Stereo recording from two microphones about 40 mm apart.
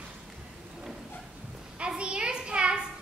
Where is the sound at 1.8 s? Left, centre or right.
Right.